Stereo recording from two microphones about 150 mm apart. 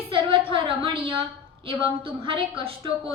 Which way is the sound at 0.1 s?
35° right (ahead or behind).